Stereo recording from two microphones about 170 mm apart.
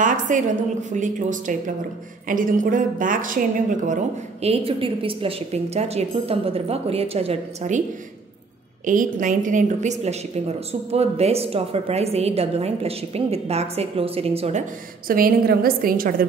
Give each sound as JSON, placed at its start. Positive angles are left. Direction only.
{"t": 0.0, "sound": "a woman's voice", "side_deg": -50}
{"t": 8.8, "sound": "a woman's voice", "side_deg": -50}
{"t": 15.0, "sound": "a woman's voice", "side_deg": -60}